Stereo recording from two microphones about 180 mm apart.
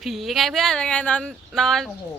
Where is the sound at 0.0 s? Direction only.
Centre (ahead or behind).